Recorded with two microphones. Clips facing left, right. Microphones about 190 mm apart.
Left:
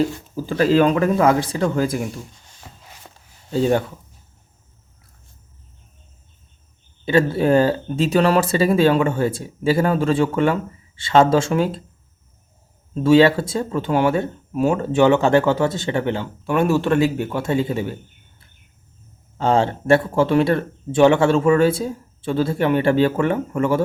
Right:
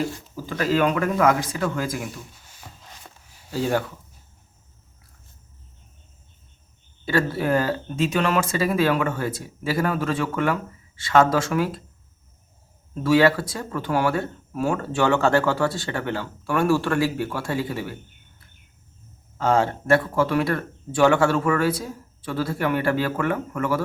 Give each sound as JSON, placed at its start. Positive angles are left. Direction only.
{"t": 0.4, "sound": "speech", "side_deg": 30}
{"t": 2.3, "sound": "a sound", "side_deg": -5}
{"t": 3.5, "sound": "speech", "side_deg": 25}
{"t": 7.0, "sound": "speech", "side_deg": 20}
{"t": 12.9, "sound": "speech", "side_deg": 25}
{"t": 19.4, "sound": "speech", "side_deg": 25}